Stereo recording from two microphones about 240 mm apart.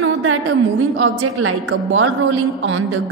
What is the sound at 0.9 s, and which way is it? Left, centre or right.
A woman's voice, right.